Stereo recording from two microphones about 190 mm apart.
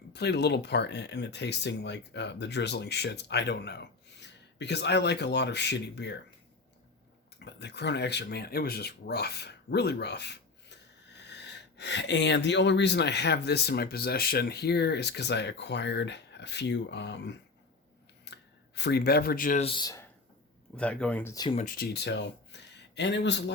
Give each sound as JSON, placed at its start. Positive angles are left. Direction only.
{"t": 0.1, "sound": "speech", "side_deg": 60}
{"t": 7.3, "sound": "speech", "side_deg": 60}
{"t": 19.6, "sound": "speech", "side_deg": 25}
{"t": 20.7, "sound": "speech", "side_deg": 5}
{"t": 21.5, "sound": "speech", "side_deg": 45}